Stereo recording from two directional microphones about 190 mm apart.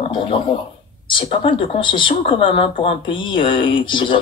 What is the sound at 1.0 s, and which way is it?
Speech, 25° left (ahead or behind).